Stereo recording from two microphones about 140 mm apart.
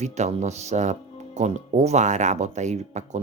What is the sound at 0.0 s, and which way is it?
Speech, 50° right (ahead or behind).